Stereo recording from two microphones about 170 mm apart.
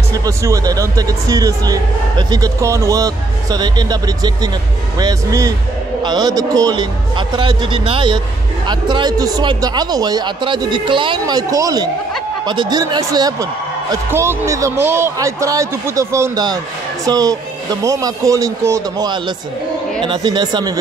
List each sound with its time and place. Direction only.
0.1 s speech: 20° right (ahead or behind)